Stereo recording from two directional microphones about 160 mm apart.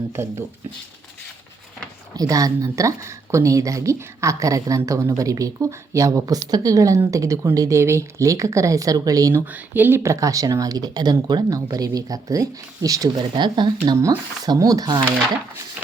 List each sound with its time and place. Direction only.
0.1 s speech: 15° right (ahead or behind)
2.1 s speech: 20° right (ahead or behind)
9.5 s speech: 10° right (ahead or behind)